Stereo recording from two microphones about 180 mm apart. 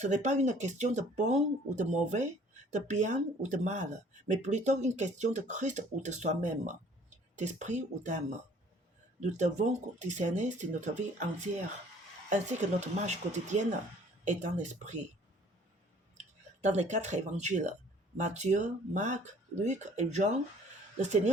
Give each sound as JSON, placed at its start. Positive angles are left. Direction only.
{"t": 0.0, "sound": "speech", "side_deg": -40}
{"t": 9.2, "sound": "speech", "side_deg": -40}
{"t": 16.6, "sound": "speech", "side_deg": -40}